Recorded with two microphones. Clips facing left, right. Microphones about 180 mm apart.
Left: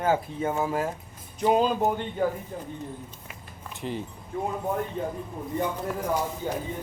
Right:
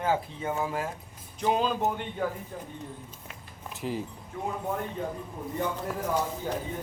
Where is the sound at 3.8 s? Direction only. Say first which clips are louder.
Even; 5° right (ahead or behind).